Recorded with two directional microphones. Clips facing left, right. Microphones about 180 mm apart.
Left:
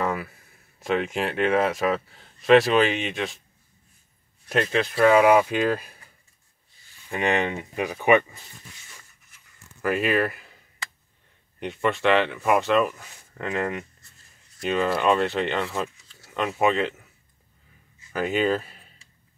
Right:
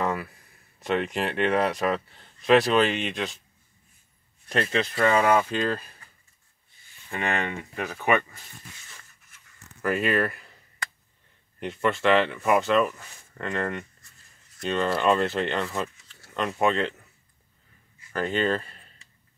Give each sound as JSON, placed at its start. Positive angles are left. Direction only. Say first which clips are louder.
{"t": 0.0, "sound": "speech", "louder": "left 1 dB", "side_deg": 0}
{"t": 4.5, "sound": "speech", "louder": "left 2 dB", "side_deg": 0}
{"t": 7.1, "sound": "speech", "louder": "left 5 dB", "side_deg": 15}
{"t": 9.8, "sound": "a sound", "louder": "left 1 dB", "side_deg": 0}
{"t": 11.6, "sound": "speech", "louder": "left 1 dB", "side_deg": 0}
{"t": 18.1, "sound": "speech", "louder": "left 2 dB", "side_deg": 10}